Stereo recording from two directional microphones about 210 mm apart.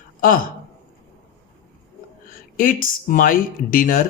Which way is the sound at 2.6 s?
40° left (ahead or behind).